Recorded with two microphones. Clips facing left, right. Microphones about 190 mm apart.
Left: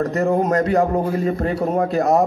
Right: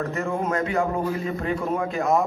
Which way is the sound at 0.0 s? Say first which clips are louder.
Left 8 dB; 40° left (ahead or behind).